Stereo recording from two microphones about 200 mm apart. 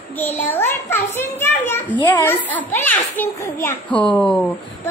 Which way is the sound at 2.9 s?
40° left (ahead or behind).